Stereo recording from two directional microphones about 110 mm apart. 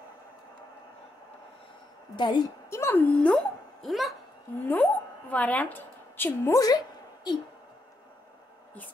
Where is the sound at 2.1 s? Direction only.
40° left (ahead or behind).